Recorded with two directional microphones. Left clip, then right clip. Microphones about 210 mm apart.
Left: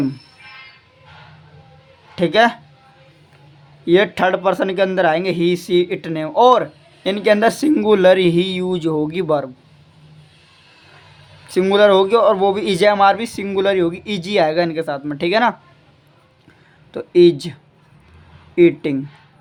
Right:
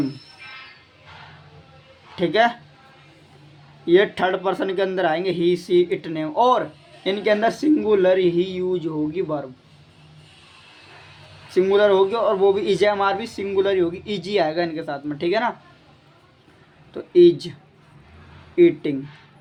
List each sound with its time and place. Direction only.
2.1 s speech: 35° left (ahead or behind)
3.8 s speech: 35° left (ahead or behind); by 9.4 s 50° left (ahead or behind)
11.4 s speech: 40° left (ahead or behind)
16.9 s speech: 35° left (ahead or behind)